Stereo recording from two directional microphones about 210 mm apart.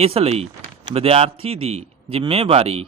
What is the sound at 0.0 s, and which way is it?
A man's voice, 30° right (ahead or behind).